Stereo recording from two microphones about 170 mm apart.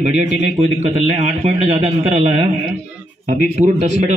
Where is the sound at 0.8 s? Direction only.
35° right (ahead or behind).